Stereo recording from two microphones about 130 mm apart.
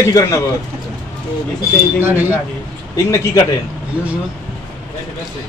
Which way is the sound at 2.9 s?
25° left (ahead or behind).